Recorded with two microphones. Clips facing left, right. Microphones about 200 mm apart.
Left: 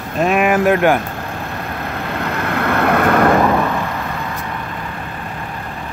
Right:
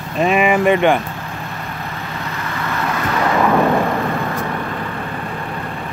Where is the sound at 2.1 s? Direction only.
60° left (ahead or behind).